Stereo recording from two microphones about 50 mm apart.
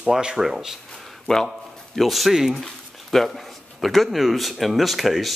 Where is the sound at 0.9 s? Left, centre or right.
Centre.